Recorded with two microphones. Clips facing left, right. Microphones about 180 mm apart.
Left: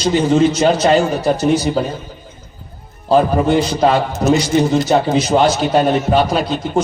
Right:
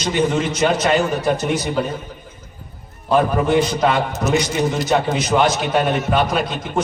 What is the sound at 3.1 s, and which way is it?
A man's voice, 30° left (ahead or behind).